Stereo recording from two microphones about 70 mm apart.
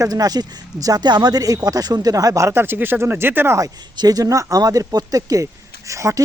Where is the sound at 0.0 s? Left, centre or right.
Right.